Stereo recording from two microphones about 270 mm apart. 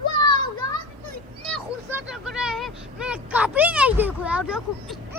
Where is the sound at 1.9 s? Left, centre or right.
Centre.